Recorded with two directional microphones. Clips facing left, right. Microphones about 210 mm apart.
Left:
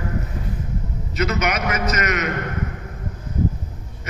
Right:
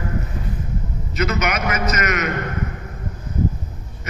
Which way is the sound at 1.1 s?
35° left (ahead or behind).